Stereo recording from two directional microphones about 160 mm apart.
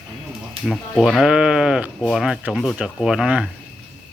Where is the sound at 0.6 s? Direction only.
Centre (ahead or behind).